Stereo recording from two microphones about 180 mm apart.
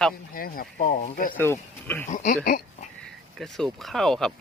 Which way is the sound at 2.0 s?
45° left (ahead or behind).